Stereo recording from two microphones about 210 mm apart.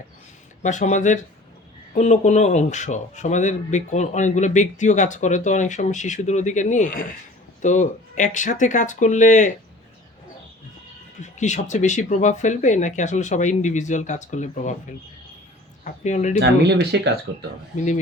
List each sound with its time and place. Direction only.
0.6 s speech: 35° left (ahead or behind)
11.2 s speech: 35° left (ahead or behind)
15.8 s speech: 35° left (ahead or behind)
16.4 s speech: 55° right (ahead or behind)
17.7 s speech: 35° left (ahead or behind)